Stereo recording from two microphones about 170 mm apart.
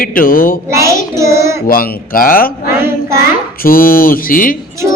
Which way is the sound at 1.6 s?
55° left (ahead or behind).